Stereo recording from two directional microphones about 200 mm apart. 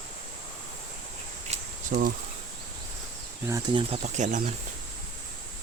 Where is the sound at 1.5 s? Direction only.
40° right (ahead or behind).